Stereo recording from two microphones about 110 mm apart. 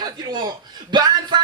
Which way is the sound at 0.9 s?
40° right (ahead or behind).